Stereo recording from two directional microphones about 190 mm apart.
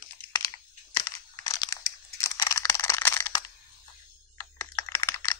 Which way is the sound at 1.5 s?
20° left (ahead or behind).